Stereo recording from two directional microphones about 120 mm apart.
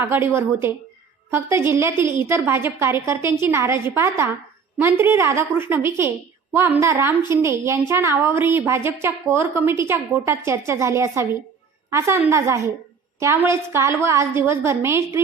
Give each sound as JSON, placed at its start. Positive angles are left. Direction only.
{"t": 0.0, "sound": "a woman's voice", "side_deg": -20}